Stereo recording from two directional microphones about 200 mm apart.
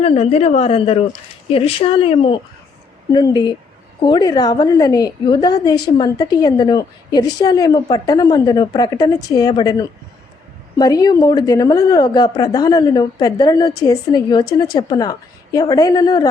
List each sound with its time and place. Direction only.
0.0 s a woman's voice: 30° left (ahead or behind)